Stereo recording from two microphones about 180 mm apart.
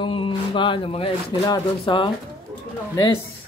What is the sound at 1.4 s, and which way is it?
Speech, 25° left (ahead or behind).